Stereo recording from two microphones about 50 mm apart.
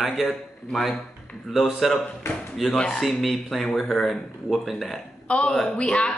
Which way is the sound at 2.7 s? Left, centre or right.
Centre.